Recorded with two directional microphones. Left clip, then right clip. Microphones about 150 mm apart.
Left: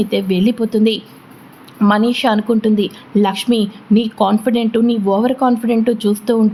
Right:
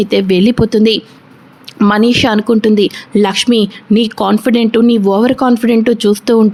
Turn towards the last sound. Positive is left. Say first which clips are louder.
# right 6 dB
turn(degrees=-40)  # may be behind; listen again after turning